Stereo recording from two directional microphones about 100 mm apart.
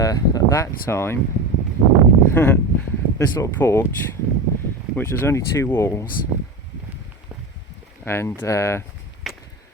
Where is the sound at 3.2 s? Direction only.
35° left (ahead or behind).